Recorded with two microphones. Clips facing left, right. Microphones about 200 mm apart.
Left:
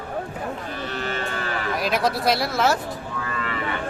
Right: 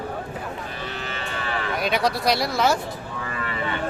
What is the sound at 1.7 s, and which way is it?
Speech, centre (ahead or behind).